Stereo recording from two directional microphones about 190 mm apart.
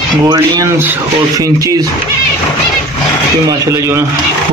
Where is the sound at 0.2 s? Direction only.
20° right (ahead or behind).